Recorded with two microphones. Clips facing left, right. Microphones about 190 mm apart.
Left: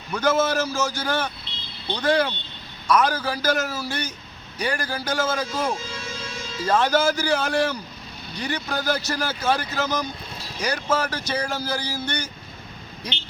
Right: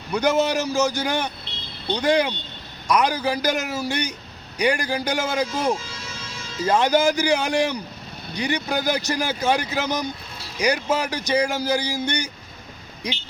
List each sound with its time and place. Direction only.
0.1 s speech: 15° right (ahead or behind)